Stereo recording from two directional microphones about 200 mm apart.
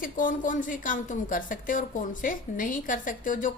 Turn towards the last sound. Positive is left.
turn(degrees=40)  # may be behind; listen again after turning